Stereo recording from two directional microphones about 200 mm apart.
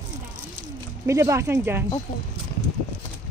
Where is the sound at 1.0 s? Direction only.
15° right (ahead or behind).